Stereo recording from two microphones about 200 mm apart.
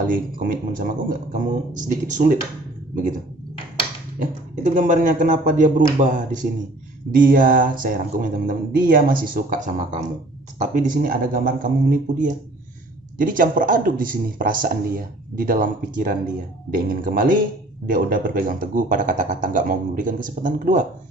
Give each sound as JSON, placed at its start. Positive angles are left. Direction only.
{"t": 0.1, "sound": "a man's voice", "side_deg": -45}
{"t": 4.2, "sound": "a man's voice", "side_deg": -40}